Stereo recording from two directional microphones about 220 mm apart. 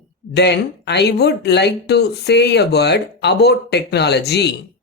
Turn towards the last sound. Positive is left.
turn(degrees=50)  # may be behind; listen again after turning